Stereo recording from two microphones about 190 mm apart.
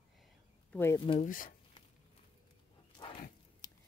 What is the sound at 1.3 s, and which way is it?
Speech, 45° left (ahead or behind).